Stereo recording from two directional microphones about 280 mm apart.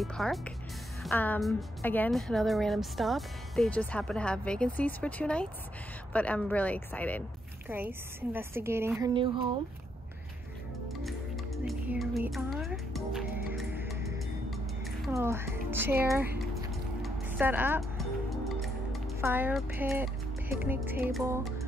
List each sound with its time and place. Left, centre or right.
0.0 s a woman's voice: centre
7.6 s a woman's voice: centre
10.9 s music: centre
15.0 s speech: centre
17.0 s music: centre